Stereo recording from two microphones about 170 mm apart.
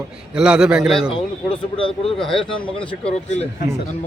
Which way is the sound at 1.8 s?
30° left (ahead or behind).